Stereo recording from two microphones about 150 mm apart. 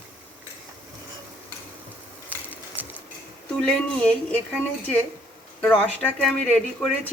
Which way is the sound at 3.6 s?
5° left (ahead or behind).